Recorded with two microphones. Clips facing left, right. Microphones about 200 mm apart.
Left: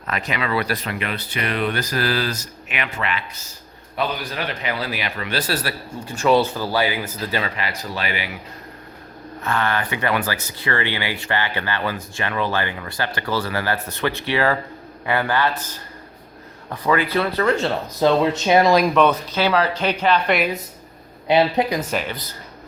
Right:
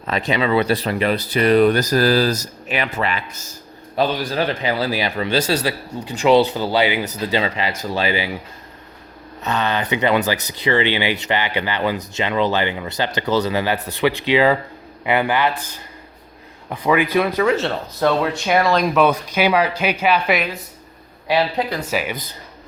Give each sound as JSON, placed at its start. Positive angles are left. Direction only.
{"t": 0.1, "sound": "speech", "side_deg": -30}
{"t": 9.4, "sound": "speech", "side_deg": -20}
{"t": 16.6, "sound": "speech", "side_deg": -15}
{"t": 18.0, "sound": "speech", "side_deg": 20}
{"t": 18.9, "sound": "speech", "side_deg": -10}
{"t": 21.2, "sound": "speech", "side_deg": 20}
{"t": 21.8, "sound": "speech", "side_deg": -5}